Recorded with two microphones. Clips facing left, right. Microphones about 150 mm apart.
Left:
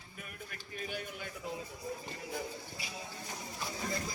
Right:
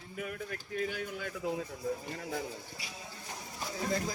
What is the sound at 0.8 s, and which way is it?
Speech, 90° right.